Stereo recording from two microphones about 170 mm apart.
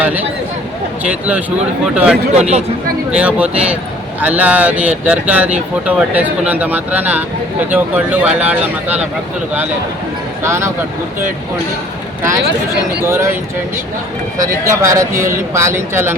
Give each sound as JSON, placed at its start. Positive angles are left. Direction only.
{"t": 0.0, "sound": "a sound", "side_deg": -10}
{"t": 1.0, "sound": "speech", "side_deg": -10}
{"t": 10.4, "sound": "speech", "side_deg": -15}
{"t": 13.1, "sound": "speech", "side_deg": -15}
{"t": 14.4, "sound": "speech", "side_deg": -20}